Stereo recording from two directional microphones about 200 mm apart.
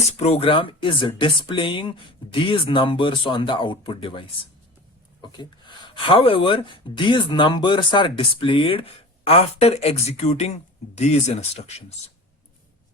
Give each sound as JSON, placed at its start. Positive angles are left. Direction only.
{"t": 0.2, "sound": "speech", "side_deg": 30}